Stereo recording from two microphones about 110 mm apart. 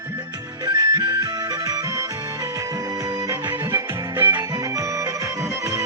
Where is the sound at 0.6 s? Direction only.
40° right (ahead or behind).